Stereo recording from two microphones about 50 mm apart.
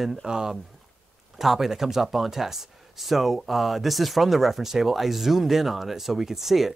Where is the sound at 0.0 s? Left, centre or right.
Centre.